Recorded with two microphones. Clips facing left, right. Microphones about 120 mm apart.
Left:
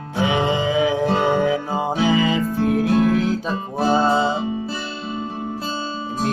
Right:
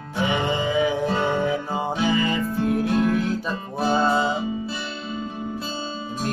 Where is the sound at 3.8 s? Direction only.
30° left (ahead or behind).